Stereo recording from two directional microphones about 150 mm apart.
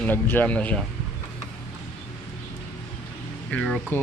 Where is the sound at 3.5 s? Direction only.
5° left (ahead or behind).